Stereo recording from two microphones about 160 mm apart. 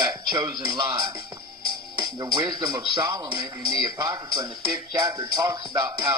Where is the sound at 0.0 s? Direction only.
25° right (ahead or behind).